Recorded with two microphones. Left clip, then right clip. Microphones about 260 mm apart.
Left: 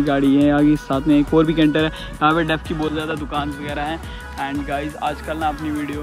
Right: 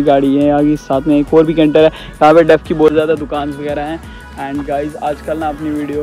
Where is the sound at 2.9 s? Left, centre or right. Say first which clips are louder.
Right 10 dB; centre.